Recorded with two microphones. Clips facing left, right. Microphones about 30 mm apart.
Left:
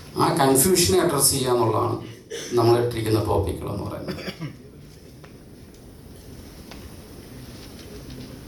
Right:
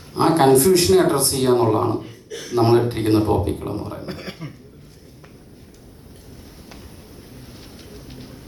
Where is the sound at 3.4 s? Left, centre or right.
Centre.